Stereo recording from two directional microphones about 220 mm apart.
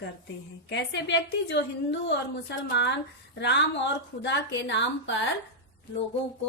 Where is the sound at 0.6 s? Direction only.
55° left (ahead or behind).